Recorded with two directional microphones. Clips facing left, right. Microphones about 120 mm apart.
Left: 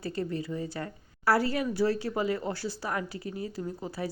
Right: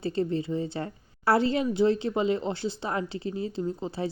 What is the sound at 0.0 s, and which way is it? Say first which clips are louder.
Speech: right 5 dB; 25° right (ahead or behind).